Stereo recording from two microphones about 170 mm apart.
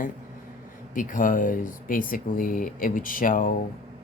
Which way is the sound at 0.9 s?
50° left (ahead or behind).